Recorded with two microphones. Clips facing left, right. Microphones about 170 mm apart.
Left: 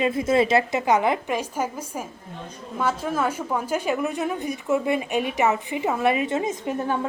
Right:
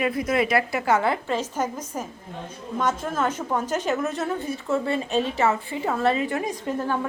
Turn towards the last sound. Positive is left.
turn(degrees=20)  # may be behind; listen again after turning